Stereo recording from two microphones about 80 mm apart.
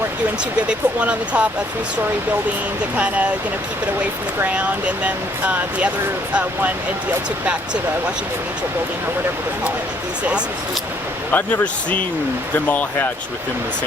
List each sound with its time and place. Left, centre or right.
0.7 s speech: centre
4.4 s speech: centre
11.3 s speech: centre